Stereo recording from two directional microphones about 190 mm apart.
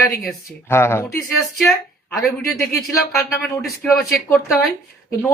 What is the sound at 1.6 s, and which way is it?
Speech, centre (ahead or behind).